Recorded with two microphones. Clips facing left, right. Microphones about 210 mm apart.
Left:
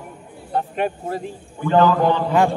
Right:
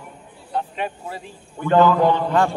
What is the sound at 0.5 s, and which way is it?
Speech, 50° left (ahead or behind).